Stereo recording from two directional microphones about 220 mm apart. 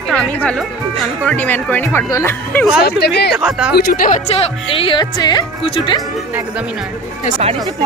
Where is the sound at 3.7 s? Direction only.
40° left (ahead or behind).